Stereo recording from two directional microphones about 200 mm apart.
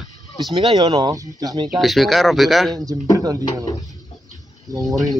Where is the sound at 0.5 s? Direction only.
20° right (ahead or behind).